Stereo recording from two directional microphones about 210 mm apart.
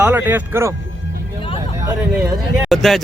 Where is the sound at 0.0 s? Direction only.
10° right (ahead or behind).